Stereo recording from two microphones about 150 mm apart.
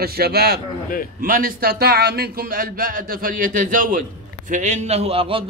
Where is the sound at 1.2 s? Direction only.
70° right (ahead or behind).